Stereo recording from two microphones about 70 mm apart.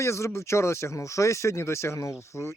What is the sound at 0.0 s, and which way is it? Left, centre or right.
Speech, left.